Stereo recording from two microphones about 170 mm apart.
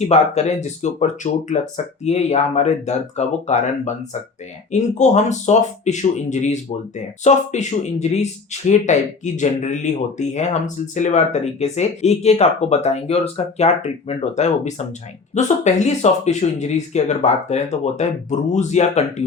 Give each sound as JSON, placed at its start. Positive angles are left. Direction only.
{"t": 0.0, "sound": "speech", "side_deg": 40}